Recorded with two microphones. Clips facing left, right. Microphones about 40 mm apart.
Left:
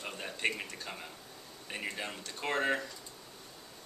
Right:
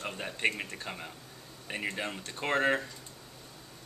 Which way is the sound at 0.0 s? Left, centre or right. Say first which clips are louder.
Right 3 dB; centre.